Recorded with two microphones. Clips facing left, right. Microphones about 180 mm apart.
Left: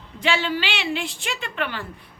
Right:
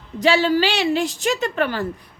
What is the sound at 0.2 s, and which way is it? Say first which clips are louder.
A woman's voice: right 7 dB; 40° right (ahead or behind).